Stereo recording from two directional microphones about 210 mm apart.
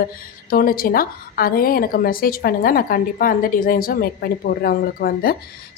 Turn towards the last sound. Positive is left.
turn(degrees=45)  # may be behind; listen again after turning